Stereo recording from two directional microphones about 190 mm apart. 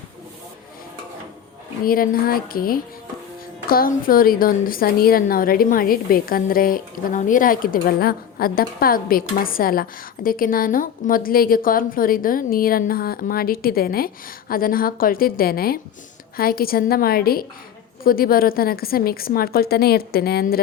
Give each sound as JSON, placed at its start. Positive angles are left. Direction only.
{"t": 1.8, "sound": "a woman's voice", "side_deg": 50}